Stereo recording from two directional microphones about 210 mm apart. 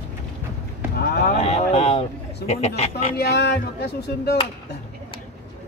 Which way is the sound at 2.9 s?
50° left (ahead or behind).